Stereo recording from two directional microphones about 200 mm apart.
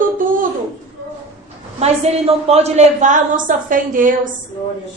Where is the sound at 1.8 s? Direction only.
30° right (ahead or behind).